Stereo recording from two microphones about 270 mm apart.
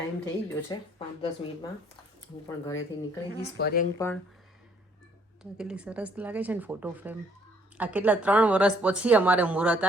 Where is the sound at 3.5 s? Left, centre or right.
Left.